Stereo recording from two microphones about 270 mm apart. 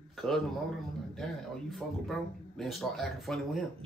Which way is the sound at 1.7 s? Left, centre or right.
Centre.